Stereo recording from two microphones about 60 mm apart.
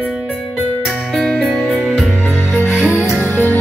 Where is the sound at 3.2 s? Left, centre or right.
Left.